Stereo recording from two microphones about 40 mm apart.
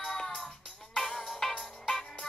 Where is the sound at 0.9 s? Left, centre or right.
Centre.